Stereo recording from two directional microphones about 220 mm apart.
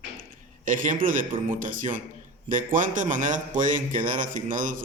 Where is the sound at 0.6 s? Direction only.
35° right (ahead or behind).